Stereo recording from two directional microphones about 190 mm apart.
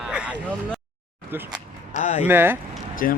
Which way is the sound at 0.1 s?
5° right (ahead or behind).